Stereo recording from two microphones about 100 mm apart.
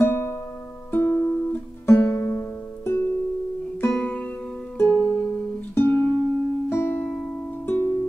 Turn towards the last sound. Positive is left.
turn(degrees=25)  # may be behind; listen again after turning